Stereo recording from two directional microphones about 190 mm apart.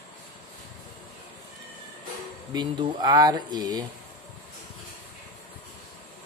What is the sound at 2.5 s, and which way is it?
Speech, 20° right (ahead or behind).